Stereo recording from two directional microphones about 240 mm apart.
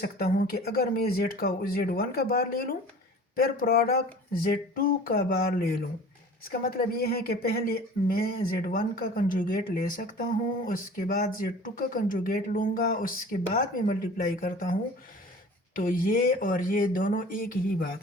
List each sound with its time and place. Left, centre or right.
0.0 s speech: left